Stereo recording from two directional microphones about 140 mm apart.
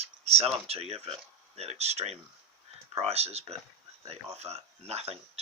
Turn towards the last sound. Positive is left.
turn(degrees=-45)  # may be behind; listen again after turning